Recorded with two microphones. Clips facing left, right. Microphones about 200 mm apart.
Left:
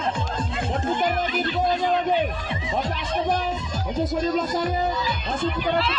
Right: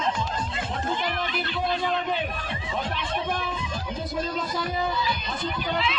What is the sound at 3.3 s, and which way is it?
Music, 40° left (ahead or behind).